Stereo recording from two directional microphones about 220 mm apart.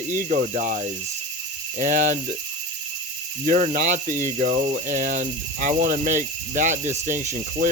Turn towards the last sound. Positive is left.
turn(degrees=-35)  # may be behind; listen again after turning